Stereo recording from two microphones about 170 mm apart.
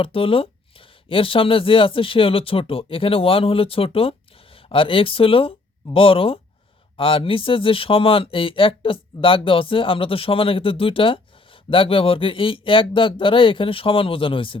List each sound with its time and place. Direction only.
0.0 s speech: 30° left (ahead or behind)